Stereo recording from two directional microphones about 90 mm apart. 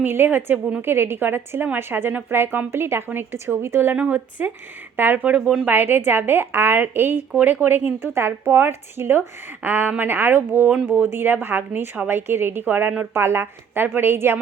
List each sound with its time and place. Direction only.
0.0 s a woman's voice: 20° right (ahead or behind)
3.9 s a woman's voice: 15° right (ahead or behind)